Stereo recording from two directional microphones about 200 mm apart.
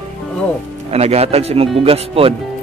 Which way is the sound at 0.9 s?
30° right (ahead or behind).